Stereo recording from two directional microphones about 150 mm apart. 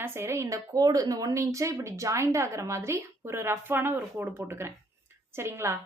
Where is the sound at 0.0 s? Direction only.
15° right (ahead or behind).